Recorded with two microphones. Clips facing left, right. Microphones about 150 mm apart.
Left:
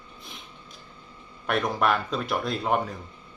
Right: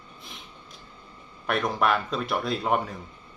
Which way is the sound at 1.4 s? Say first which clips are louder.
Even; centre (ahead or behind).